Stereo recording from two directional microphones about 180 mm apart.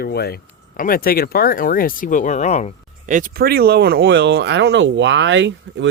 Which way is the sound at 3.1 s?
50° right (ahead or behind).